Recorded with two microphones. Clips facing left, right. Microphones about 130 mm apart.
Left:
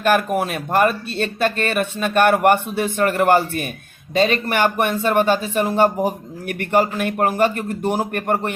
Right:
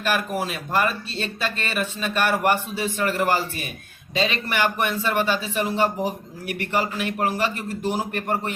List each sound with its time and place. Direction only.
0.0 s a man's voice: 55° left (ahead or behind)